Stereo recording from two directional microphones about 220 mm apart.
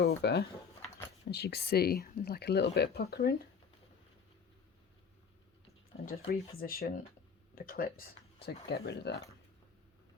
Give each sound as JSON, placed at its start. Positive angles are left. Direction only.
{"t": 0.2, "sound": "speech", "side_deg": 50}
{"t": 5.9, "sound": "speech", "side_deg": 55}
{"t": 6.6, "sound": "speech", "side_deg": 40}